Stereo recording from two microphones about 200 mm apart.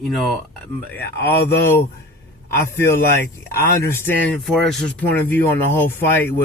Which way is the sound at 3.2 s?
50° left (ahead or behind).